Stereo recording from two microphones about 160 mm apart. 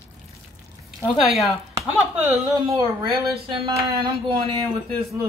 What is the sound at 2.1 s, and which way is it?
Speech, 15° right (ahead or behind).